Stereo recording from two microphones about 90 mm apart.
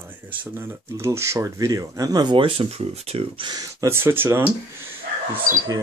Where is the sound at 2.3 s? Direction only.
80° right.